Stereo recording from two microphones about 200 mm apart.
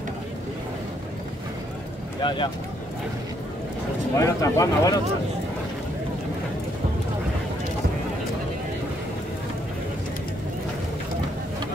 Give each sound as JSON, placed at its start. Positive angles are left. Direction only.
{"t": 2.2, "sound": "speech", "side_deg": 25}
{"t": 4.2, "sound": "speech", "side_deg": 15}